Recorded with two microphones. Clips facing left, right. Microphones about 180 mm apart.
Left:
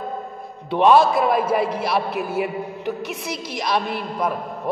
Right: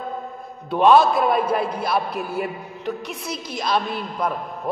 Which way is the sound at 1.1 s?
Centre (ahead or behind).